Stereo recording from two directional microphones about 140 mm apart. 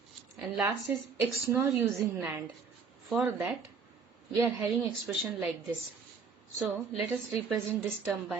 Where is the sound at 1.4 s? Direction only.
20° right (ahead or behind).